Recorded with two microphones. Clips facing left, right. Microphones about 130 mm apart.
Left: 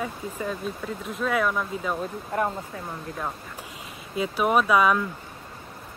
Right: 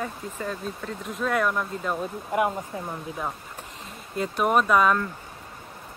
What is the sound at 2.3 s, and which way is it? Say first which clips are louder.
Speech: right 2 dB; 10° right (ahead or behind).